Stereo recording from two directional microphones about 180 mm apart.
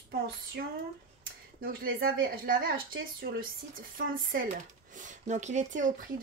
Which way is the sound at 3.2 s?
65° right (ahead or behind).